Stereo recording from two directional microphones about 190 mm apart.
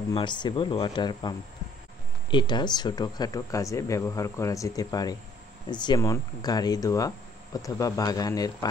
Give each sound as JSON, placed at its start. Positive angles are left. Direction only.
{"t": 0.1, "sound": "speech", "side_deg": 25}
{"t": 2.3, "sound": "speech", "side_deg": 25}